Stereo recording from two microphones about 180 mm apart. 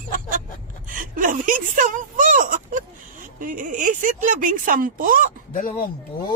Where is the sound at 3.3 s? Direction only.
45° right (ahead or behind).